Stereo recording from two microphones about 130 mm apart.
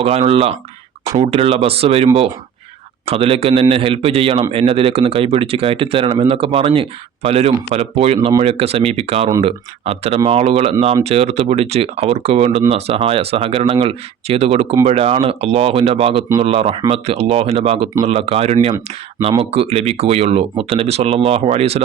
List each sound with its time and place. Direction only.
0.0 s speech: 50° right (ahead or behind)
3.1 s speech: 45° right (ahead or behind)